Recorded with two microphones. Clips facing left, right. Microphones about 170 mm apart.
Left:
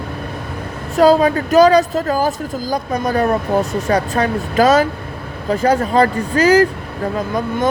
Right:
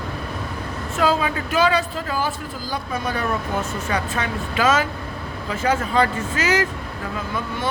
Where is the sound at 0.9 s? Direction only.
40° left (ahead or behind).